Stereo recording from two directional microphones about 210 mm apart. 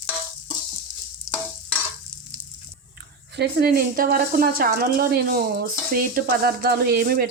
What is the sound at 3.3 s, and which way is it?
A woman's voice, 50° right (ahead or behind).